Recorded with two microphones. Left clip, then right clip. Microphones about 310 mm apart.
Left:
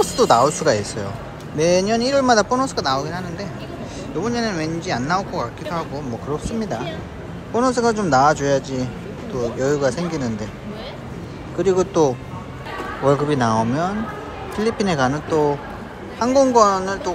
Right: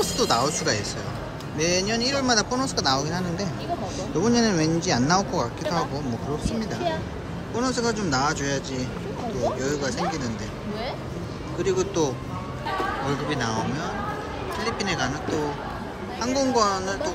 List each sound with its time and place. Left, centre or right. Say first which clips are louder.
0.0 s speech: left 8 dB; centre
11.5 s speech: left 7 dB; centre
14.6 s speech: left 8 dB; centre